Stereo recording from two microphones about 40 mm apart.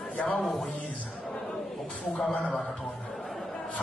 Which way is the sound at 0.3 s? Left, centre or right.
Centre.